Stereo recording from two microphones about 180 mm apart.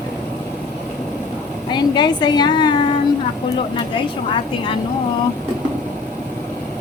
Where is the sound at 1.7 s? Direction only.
25° left (ahead or behind).